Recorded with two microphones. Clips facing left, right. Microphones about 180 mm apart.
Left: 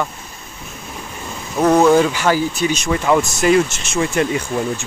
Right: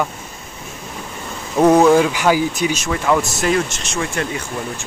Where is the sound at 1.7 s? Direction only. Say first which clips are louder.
Even; 5° right (ahead or behind).